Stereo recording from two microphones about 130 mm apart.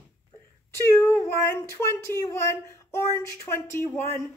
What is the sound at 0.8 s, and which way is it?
Speech, 20° left (ahead or behind).